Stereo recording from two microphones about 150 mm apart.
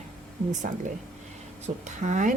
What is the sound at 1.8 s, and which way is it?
Speech, 55° right (ahead or behind).